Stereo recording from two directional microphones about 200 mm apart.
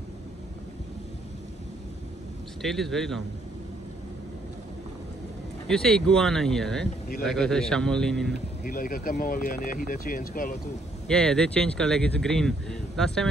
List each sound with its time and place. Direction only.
2.6 s speech: centre (ahead or behind)
5.7 s speech: 5° left (ahead or behind)
8.6 s speech: 45° left (ahead or behind)
11.1 s speech: 5° left (ahead or behind)